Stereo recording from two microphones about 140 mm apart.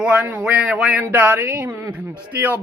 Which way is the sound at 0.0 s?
10° right (ahead or behind).